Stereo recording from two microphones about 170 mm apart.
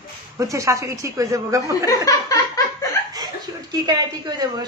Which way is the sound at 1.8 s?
20° left (ahead or behind).